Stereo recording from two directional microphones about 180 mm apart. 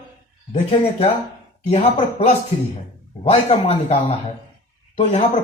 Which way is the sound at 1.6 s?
35° left (ahead or behind).